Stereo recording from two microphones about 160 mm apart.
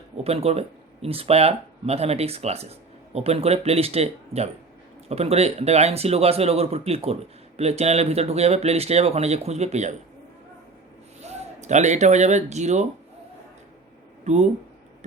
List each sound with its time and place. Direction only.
0.3 s speech: 40° right (ahead or behind)
11.2 s speech: 45° right (ahead or behind)
14.3 s speech: 45° right (ahead or behind)